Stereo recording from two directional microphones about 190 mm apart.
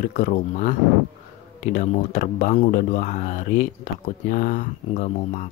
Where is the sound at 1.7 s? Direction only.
40° left (ahead or behind).